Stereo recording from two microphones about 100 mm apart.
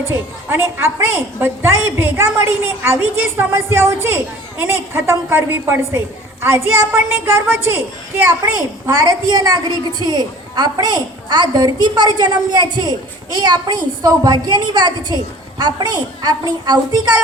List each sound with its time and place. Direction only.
1.1 s a woman's voice: 20° right (ahead or behind); by 17.2 s 40° right (ahead or behind)